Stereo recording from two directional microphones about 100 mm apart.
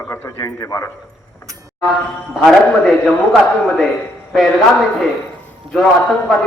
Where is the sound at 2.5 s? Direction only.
Centre (ahead or behind).